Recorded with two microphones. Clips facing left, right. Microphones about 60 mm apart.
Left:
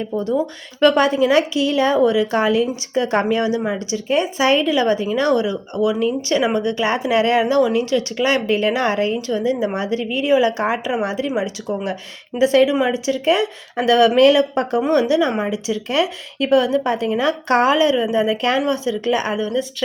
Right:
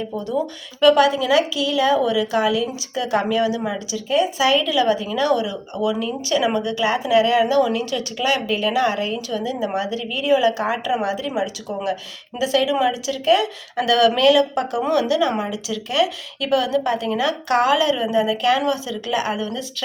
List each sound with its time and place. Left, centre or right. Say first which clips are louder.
0.8 s a woman's voice: even; left
19.4 s a woman's voice: left 6 dB; left